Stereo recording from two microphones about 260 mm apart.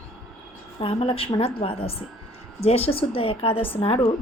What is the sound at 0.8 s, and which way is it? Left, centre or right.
A woman's voice, left.